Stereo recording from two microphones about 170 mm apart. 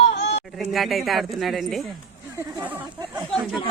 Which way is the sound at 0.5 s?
Centre (ahead or behind).